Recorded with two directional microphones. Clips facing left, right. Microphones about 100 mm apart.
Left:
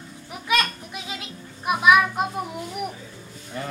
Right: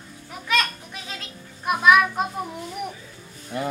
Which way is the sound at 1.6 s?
10° left (ahead or behind).